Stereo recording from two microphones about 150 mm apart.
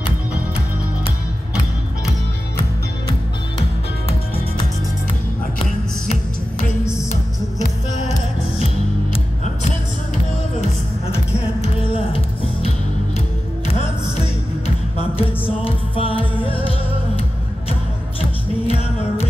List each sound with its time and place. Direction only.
9.1 s music: 45° left (ahead or behind)
11.6 s music: 40° left (ahead or behind)
15.0 s music: 40° left (ahead or behind)
18.7 s music: 40° left (ahead or behind)